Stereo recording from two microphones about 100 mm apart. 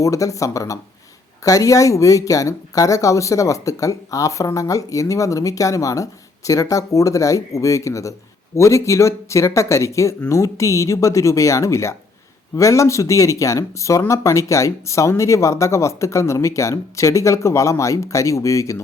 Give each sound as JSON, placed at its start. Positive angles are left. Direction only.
{"t": 0.0, "sound": "speech", "side_deg": 35}